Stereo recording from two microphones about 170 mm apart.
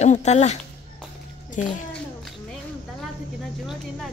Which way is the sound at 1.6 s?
45° left (ahead or behind).